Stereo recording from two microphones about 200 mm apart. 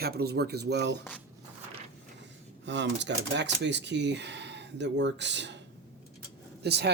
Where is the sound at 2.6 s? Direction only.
60° right (ahead or behind).